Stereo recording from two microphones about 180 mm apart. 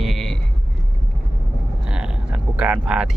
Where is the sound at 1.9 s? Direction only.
5° right (ahead or behind).